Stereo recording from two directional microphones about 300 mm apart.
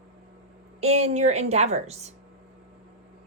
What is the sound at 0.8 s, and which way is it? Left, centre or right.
A woman's voice, right.